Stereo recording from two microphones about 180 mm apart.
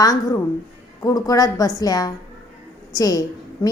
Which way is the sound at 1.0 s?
20° left (ahead or behind).